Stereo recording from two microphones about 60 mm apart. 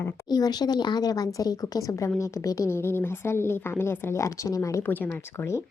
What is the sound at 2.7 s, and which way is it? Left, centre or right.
A woman's voice, left.